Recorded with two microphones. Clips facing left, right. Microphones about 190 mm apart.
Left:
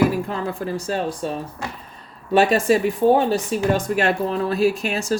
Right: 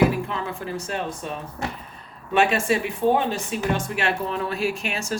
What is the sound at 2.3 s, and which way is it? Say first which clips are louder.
Speech: left 4 dB; 35° left (ahead or behind).